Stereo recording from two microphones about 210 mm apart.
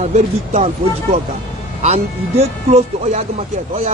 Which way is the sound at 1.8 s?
30° right (ahead or behind).